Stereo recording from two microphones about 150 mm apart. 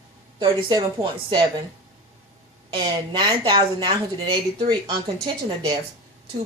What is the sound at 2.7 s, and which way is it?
Speech, 30° right (ahead or behind).